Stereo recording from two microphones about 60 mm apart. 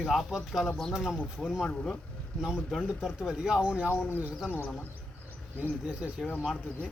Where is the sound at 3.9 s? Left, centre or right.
Left.